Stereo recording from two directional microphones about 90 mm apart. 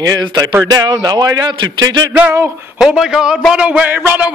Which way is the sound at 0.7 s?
45° right (ahead or behind).